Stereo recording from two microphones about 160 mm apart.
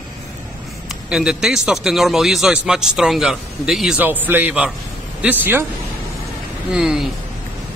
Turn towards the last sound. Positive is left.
turn(degrees=-5)  # may be behind; listen again after turning